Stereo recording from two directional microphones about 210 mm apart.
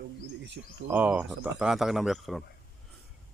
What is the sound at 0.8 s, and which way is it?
Speech, 10° right (ahead or behind).